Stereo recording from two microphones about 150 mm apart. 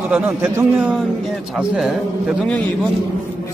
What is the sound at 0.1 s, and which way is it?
A man's voice, 15° right (ahead or behind).